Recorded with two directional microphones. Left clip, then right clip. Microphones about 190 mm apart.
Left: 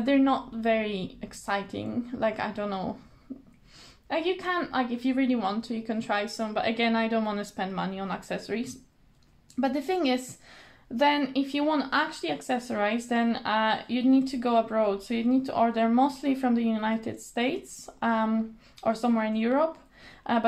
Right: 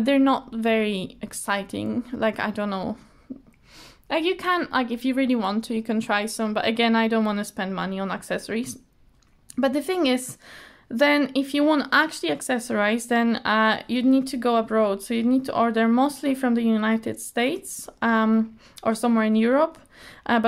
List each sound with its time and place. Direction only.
0.0 s speech: 45° right (ahead or behind)
4.1 s speech: 45° right (ahead or behind)